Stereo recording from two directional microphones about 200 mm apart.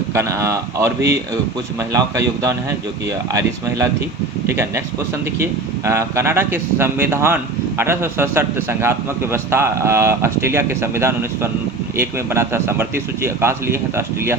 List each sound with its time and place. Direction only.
0.1 s speech: 15° right (ahead or behind)
4.4 s speech: 15° right (ahead or behind)